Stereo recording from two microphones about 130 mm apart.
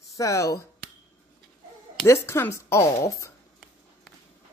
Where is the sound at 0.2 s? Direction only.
25° left (ahead or behind).